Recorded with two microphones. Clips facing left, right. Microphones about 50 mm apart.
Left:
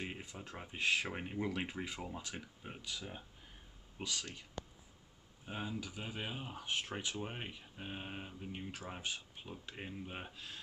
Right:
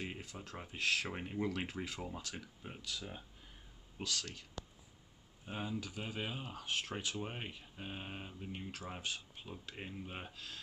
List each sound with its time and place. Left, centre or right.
0.0 s speech: centre
1.0 s speech: centre
5.4 s speech: centre
6.5 s speech: centre
7.2 s speech: centre
10.3 s speech: centre